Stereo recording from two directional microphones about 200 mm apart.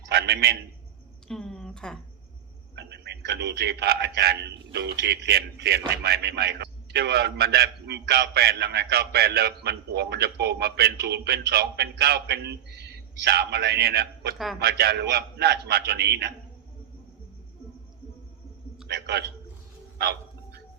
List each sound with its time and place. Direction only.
0.1 s a sound: 55° right (ahead or behind)
1.3 s a woman's voice: centre (ahead or behind)
2.7 s a man's voice: 60° right (ahead or behind)
14.3 s a man's voice: centre (ahead or behind)
14.6 s a man's voice: 55° right (ahead or behind)
18.9 s a man's voice: 60° right (ahead or behind)
20.0 s dog: 55° right (ahead or behind)